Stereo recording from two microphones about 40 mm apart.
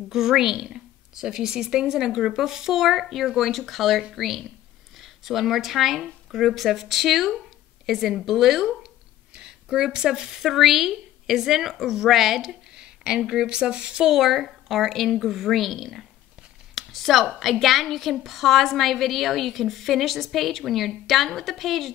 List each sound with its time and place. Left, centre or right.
0.1 s a woman's voice: centre
9.3 s a woman's voice: centre
12.7 s a sound: right
13.3 s a woman's voice: centre
16.7 s a sound: centre
17.4 s a woman's voice: centre